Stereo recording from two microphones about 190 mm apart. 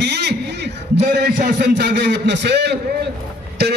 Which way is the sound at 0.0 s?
60° right (ahead or behind).